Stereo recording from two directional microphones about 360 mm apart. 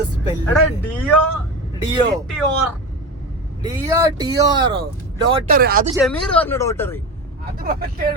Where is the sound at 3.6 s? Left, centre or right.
Centre.